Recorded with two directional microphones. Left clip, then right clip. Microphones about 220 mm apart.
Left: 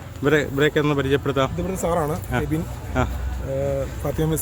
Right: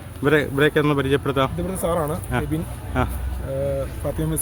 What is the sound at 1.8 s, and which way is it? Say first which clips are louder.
Speech: even; 15° left (ahead or behind).